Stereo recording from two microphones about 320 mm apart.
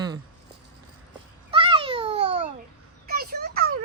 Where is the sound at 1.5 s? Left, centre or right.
Centre.